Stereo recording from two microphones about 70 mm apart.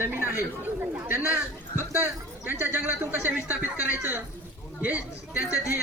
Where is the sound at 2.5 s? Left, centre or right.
Right.